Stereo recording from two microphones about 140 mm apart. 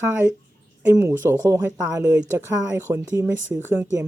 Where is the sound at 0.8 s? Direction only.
15° right (ahead or behind).